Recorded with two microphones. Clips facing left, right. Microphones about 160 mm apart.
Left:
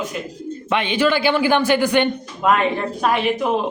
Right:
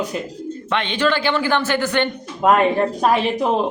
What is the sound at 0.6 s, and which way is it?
A man's voice, 10° left (ahead or behind).